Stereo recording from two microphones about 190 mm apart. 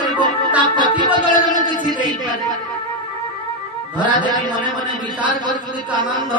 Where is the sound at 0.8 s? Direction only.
25° right (ahead or behind).